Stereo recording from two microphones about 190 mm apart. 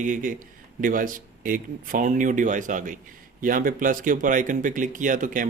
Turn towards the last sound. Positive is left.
turn(degrees=-45)  # may be behind; listen again after turning